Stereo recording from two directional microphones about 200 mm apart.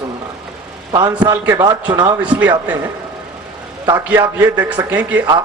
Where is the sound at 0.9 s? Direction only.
20° right (ahead or behind).